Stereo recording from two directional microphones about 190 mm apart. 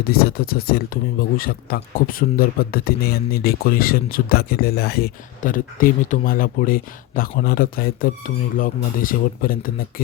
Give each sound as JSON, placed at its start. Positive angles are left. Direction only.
{"t": 0.0, "sound": "speech", "side_deg": 55}